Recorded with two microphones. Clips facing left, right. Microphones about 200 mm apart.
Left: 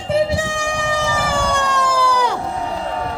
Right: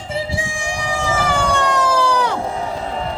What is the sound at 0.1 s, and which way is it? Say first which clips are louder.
Music: left 7 dB; 70° left (ahead or behind).